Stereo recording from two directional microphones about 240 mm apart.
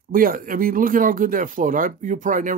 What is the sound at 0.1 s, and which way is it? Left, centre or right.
Speech, right.